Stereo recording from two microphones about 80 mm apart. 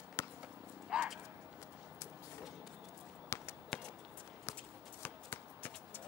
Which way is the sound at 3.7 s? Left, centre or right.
Centre.